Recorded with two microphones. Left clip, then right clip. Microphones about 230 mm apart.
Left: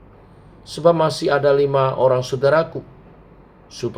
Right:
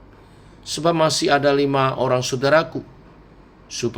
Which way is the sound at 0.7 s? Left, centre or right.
Right.